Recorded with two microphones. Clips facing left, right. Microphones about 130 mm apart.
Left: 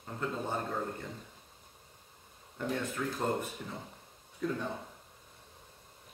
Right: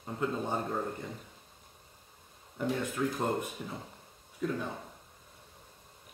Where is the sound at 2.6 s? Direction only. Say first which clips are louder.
Right 3 dB; 10° right (ahead or behind).